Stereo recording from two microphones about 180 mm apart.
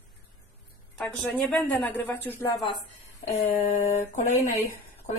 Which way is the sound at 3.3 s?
40° left (ahead or behind).